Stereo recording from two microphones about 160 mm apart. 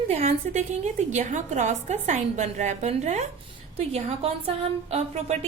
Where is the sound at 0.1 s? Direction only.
45° right (ahead or behind).